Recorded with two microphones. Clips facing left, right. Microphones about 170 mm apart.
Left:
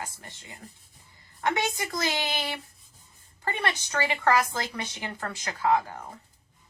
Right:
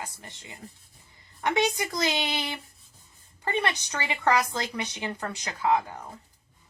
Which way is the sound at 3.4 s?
20° right (ahead or behind).